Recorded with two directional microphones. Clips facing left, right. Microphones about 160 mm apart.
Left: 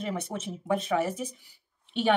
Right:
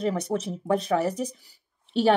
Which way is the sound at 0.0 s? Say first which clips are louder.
Right 7 dB; 40° right (ahead or behind).